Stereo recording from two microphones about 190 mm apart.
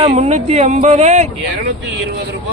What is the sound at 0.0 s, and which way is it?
Speech, 35° right (ahead or behind).